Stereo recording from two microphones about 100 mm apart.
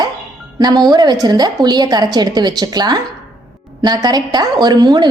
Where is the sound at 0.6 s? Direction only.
40° right (ahead or behind).